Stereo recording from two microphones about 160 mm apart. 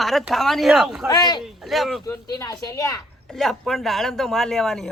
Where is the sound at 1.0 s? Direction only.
25° left (ahead or behind).